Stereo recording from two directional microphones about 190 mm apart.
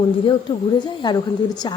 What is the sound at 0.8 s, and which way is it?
Speech, 20° left (ahead or behind).